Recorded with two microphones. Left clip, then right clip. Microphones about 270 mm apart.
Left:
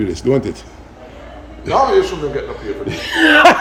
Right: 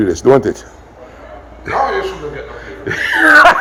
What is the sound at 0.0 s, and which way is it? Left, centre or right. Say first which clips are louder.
Speech: right 6 dB; centre.